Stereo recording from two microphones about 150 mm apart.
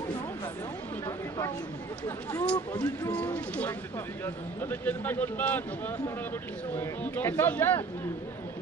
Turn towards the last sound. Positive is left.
turn(degrees=15)  # may be behind; listen again after turning